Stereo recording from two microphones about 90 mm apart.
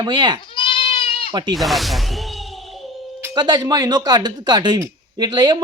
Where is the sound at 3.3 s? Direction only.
50° right (ahead or behind).